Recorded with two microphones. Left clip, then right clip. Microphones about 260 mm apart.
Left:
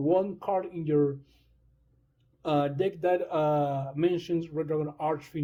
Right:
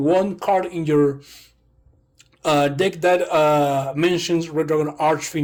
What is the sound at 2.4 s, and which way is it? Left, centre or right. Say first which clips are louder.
Speech: right 9 dB; centre.